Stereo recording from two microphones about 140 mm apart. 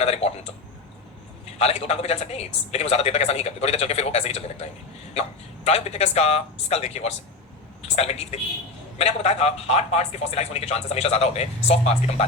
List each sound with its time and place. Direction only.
0.0 s a man's voice: 50° left (ahead or behind)
1.5 s a man's voice: 50° left (ahead or behind)